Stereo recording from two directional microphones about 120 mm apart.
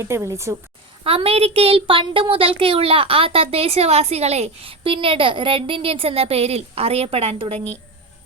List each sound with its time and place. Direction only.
0.0 s a woman's voice: 25° right (ahead or behind)
1.0 s a child's voice: 55° right (ahead or behind)